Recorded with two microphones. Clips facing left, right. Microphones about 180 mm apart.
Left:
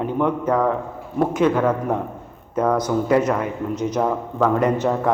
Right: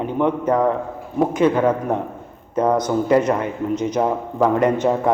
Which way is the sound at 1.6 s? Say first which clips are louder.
Right 2 dB; 15° right (ahead or behind).